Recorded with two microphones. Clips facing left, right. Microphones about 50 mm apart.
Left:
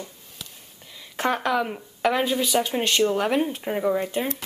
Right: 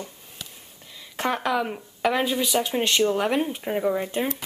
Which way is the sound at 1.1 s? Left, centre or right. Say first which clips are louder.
Left 1 dB; centre.